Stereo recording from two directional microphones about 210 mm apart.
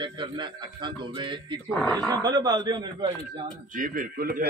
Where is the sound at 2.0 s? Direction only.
20° right (ahead or behind).